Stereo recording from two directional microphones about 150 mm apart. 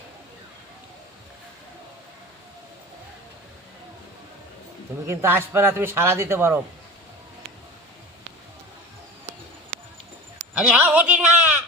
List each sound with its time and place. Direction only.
5.0 s a man's voice: 15° right (ahead or behind)
10.6 s bleat: 5° right (ahead or behind)